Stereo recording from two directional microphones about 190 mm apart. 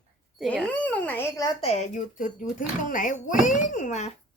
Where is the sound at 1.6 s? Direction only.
35° left (ahead or behind).